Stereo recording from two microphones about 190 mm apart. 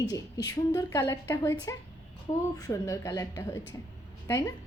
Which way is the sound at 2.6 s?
20° left (ahead or behind).